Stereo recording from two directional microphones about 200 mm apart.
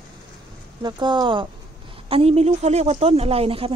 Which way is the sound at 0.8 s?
20° right (ahead or behind).